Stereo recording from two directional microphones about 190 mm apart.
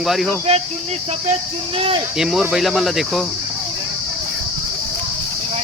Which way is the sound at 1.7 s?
30° right (ahead or behind).